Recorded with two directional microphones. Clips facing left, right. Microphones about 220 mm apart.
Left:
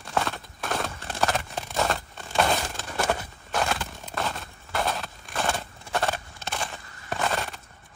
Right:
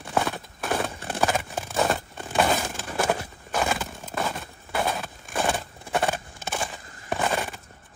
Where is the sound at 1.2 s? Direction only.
Centre (ahead or behind).